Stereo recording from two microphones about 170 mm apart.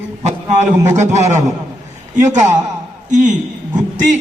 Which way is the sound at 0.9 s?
40° right (ahead or behind).